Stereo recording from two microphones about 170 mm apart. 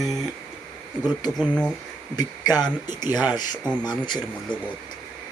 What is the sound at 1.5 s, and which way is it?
Speech, 5° left (ahead or behind).